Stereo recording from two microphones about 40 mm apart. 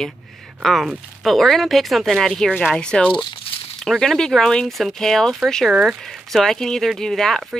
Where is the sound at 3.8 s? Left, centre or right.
Centre.